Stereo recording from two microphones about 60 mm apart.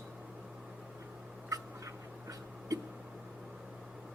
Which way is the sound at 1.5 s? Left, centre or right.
Right.